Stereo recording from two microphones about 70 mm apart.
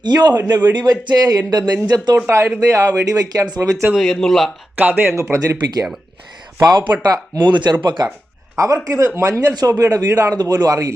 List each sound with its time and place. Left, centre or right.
0.0 s a man's voice: right
0.5 s speech: right
2.1 s speech: right
2.7 s speech: right
3.1 s speech: right
3.6 s speech: right
3.9 s speech: centre
4.8 s speech: right
5.1 s speech: right
6.6 s speech: right
7.1 s speech: right
8.5 s speech: right